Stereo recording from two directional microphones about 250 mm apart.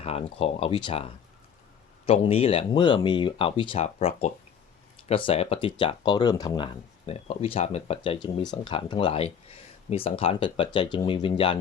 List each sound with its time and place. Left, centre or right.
0.0 s speech: left